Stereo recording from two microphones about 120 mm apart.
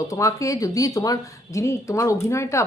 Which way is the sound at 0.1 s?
25° left (ahead or behind).